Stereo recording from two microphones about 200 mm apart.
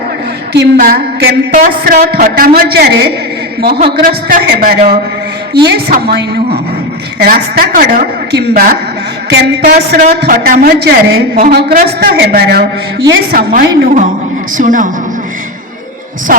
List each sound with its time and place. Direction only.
0.5 s a woman's voice: 55° right (ahead or behind)
16.3 s a woman's voice: 45° right (ahead or behind)